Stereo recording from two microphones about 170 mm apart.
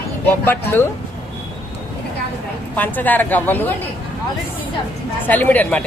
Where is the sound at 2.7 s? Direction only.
10° left (ahead or behind).